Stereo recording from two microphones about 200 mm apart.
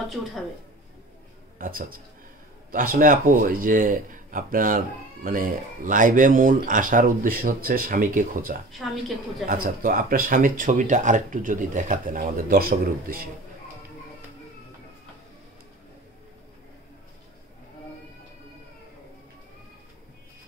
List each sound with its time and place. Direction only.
1.6 s speech: 45° right (ahead or behind)
8.8 s a woman's voice: centre (ahead or behind)
9.5 s speech: 45° right (ahead or behind)